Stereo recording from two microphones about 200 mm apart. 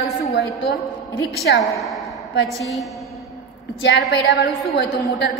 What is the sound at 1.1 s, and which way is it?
Speech, 55° left (ahead or behind).